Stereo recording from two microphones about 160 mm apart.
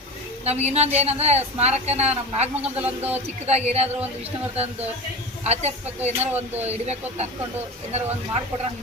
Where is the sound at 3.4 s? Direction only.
40° right (ahead or behind).